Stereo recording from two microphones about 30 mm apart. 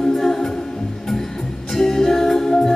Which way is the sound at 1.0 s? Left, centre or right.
Centre.